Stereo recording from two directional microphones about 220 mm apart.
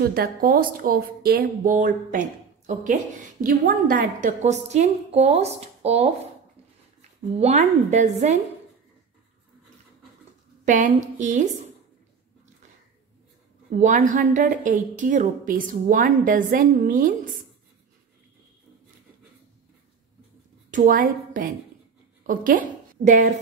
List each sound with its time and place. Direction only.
0.0 s speech: 45° right (ahead or behind); by 6.0 s 30° right (ahead or behind)
7.3 s speech: 30° right (ahead or behind)
10.7 s speech: 35° right (ahead or behind)
13.7 s speech: 35° right (ahead or behind)
20.7 s a woman's voice: 40° right (ahead or behind)